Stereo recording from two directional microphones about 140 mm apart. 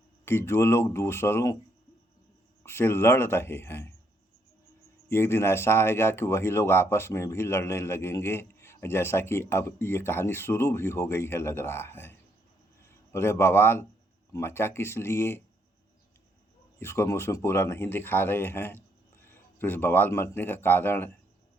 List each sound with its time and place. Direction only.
0.3 s speech: 15° left (ahead or behind)
2.6 s speech: 15° left (ahead or behind)
5.0 s a man's voice: 15° left (ahead or behind)
16.8 s a man's voice: 15° left (ahead or behind)